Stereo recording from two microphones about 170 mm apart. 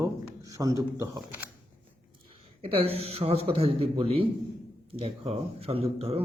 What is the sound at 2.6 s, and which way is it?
Speech, 35° right (ahead or behind).